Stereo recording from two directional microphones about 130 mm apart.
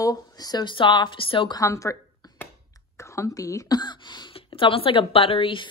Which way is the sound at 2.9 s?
20° left (ahead or behind).